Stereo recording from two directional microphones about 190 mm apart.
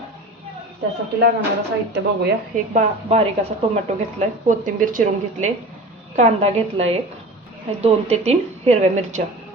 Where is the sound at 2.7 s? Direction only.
35° right (ahead or behind).